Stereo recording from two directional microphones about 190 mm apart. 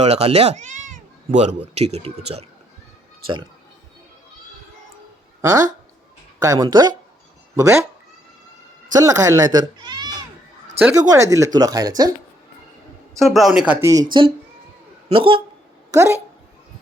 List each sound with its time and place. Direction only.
0.0 s speech: 35° right (ahead or behind)
5.4 s speech: 15° right (ahead or behind)
8.9 s speech: 20° right (ahead or behind)
10.8 s speech: 10° right (ahead or behind)
13.1 s speech: centre (ahead or behind)
13.9 s speech: 20° right (ahead or behind)
15.9 s speech: 15° right (ahead or behind)